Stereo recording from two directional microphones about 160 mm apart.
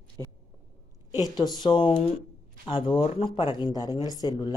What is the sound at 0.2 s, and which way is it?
Speech, 20° left (ahead or behind).